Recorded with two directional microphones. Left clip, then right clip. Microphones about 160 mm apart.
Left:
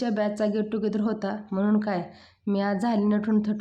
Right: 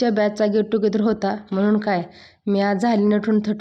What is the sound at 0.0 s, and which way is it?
Speech, 25° right (ahead or behind).